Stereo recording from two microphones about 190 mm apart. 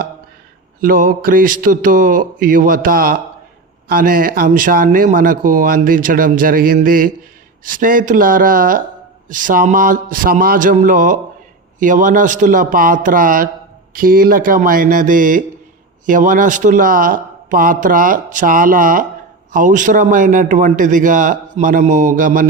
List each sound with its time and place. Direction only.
0.8 s speech: 45° right (ahead or behind)